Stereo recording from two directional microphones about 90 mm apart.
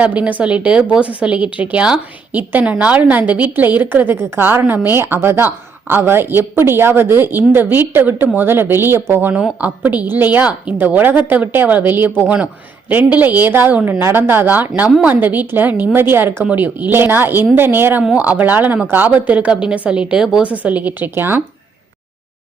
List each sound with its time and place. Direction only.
0.0 s a woman's voice: 15° right (ahead or behind)
9.3 s a woman's voice: 15° right (ahead or behind)